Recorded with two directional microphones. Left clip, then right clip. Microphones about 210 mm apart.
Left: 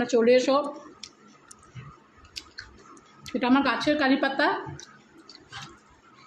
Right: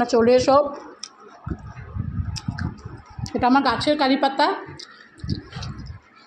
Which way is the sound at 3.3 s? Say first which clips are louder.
Right 5 dB; 10° right (ahead or behind).